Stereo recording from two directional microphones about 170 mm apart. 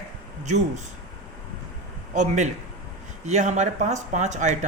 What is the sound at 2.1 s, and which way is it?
Speech, 45° right (ahead or behind).